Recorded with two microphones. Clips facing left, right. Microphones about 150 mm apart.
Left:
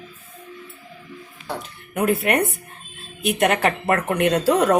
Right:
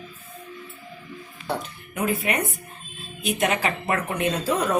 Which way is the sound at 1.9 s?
65° left (ahead or behind).